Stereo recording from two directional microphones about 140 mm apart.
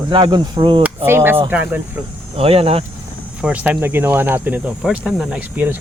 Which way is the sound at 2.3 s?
45° right (ahead or behind).